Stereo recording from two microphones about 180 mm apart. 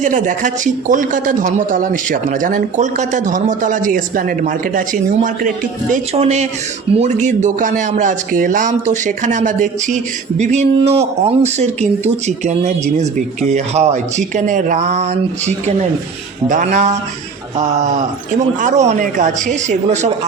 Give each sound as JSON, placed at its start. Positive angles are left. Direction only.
{"t": 0.0, "sound": "speech", "side_deg": -45}
{"t": 5.9, "sound": "speech", "side_deg": -40}